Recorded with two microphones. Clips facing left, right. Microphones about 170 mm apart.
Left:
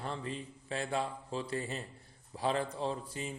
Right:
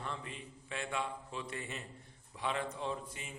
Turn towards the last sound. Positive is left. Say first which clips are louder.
# left 4 dB
turn(degrees=35)  # may be behind; listen again after turning